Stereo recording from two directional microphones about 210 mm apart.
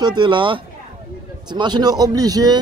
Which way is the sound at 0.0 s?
20° right (ahead or behind).